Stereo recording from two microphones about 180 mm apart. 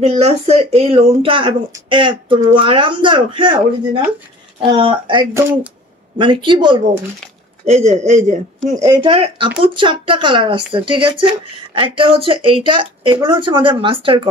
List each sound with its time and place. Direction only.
0.0 s speech: 35° right (ahead or behind)
4.6 s speech: 30° right (ahead or behind)
5.3 s speech: 10° right (ahead or behind)
6.1 s speech: 25° right (ahead or behind)
7.6 s speech: 40° right (ahead or behind)
8.7 s speech: 25° right (ahead or behind)